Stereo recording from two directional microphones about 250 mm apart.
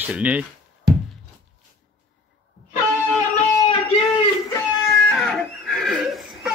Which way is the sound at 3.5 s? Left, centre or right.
Left.